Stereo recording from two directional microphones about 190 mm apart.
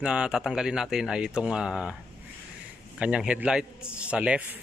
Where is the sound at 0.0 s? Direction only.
5° right (ahead or behind).